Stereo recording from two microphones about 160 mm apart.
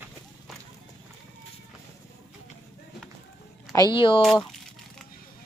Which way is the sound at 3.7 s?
25° left (ahead or behind).